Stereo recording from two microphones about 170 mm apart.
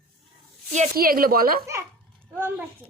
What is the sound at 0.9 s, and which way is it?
Speech, 60° right (ahead or behind).